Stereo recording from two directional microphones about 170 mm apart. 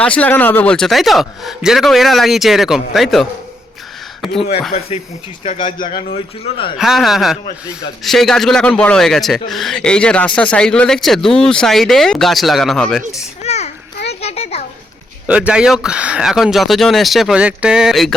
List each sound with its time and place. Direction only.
0.0 s speech: 10° left (ahead or behind)
5.4 s speech: 40° left (ahead or behind)
5.9 s a man's voice: 35° left (ahead or behind)
6.7 s speech: centre (ahead or behind)
13.4 s children playing: 40° left (ahead or behind)
15.3 s speech: 5° right (ahead or behind)